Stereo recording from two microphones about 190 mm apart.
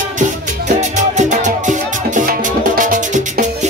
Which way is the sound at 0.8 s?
40° right (ahead or behind).